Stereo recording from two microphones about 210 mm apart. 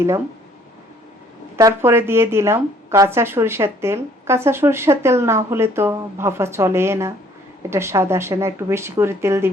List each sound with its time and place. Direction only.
1.5 s speech: 15° right (ahead or behind)